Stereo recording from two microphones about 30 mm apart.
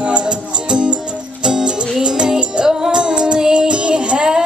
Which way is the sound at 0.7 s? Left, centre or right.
Right.